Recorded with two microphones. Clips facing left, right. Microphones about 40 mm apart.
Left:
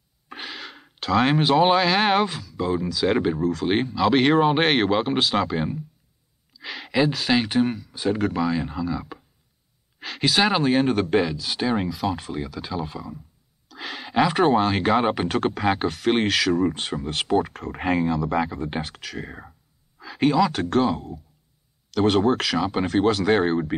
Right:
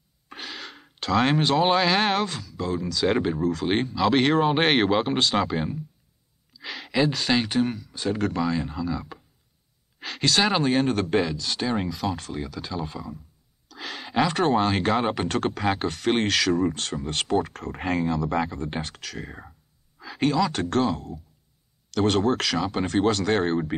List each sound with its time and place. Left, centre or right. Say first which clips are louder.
0.3 s speech: left 2 dB; centre
16.7 s speech: left 2 dB; centre
17.0 s speech: left 2 dB; centre